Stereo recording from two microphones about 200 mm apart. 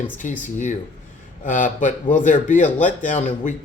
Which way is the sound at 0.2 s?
40° left (ahead or behind).